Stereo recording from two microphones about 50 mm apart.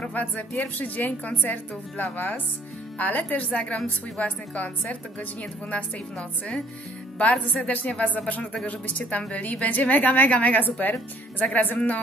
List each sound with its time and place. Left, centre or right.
0.4 s a woman's voice: left